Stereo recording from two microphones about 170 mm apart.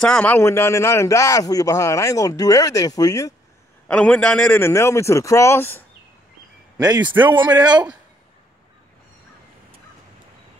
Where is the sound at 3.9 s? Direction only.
5° left (ahead or behind).